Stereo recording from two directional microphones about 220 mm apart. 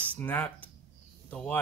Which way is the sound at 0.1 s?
5° left (ahead or behind).